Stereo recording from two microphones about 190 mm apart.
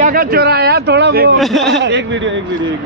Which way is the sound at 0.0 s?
50° right (ahead or behind).